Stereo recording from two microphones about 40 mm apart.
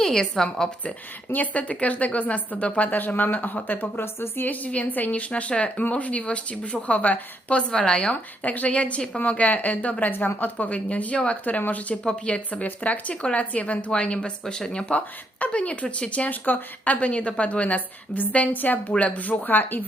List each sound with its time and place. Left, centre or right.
0.0 s a woman's voice: centre
1.3 s speech: left
2.9 s a woman's voice: left
3.9 s a woman's voice: left
4.4 s a woman's voice: left
5.3 s speech: left
7.7 s speech: left
8.1 s speech: left
10.0 s a woman's voice: left
10.7 s a woman's voice: left
12.0 s speech: left
12.5 s speech: left
14.4 s speech: centre
14.9 s a woman's voice: left